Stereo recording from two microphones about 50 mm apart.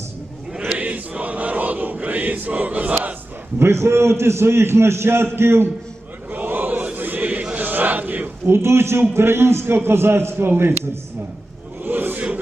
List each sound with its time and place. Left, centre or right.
0.6 s choir: right
3.6 s a man's voice: right
6.3 s chant: right
7.5 s a sound: right
8.4 s a man's voice: right
11.8 s a sound: right